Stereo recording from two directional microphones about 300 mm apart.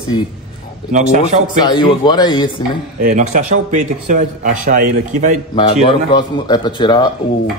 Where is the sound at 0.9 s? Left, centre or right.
Right.